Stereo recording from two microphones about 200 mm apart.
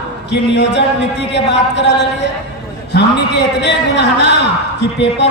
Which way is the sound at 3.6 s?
60° left (ahead or behind).